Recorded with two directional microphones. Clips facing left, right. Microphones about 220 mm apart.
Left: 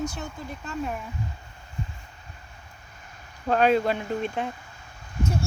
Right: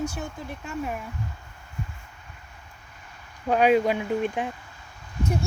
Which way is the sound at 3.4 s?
10° right (ahead or behind).